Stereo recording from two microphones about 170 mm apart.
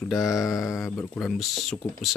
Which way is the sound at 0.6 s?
20° left (ahead or behind).